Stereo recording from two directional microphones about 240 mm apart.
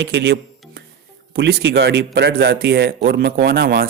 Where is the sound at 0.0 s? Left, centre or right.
Right.